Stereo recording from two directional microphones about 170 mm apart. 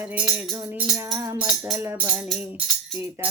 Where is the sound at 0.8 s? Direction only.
10° right (ahead or behind).